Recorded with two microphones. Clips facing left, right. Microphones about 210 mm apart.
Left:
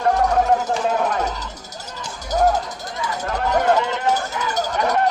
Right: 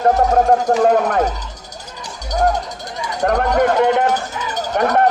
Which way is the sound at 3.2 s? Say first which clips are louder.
Right 4 dB; 60° right (ahead or behind).